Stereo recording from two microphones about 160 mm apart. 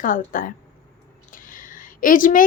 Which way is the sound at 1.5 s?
55° left (ahead or behind).